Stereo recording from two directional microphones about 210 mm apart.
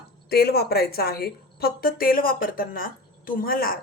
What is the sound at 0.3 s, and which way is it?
A woman's voice, 45° left (ahead or behind).